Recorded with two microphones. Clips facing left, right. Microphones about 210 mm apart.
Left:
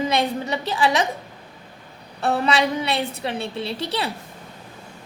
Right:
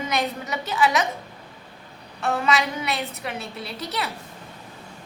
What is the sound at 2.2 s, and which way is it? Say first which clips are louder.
A woman's voice: left 3 dB; 35° left (ahead or behind).